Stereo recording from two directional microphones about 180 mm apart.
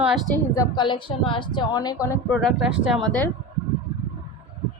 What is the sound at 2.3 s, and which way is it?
Speech, centre (ahead or behind).